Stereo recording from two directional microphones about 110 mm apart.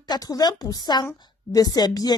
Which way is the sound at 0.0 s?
35° left (ahead or behind).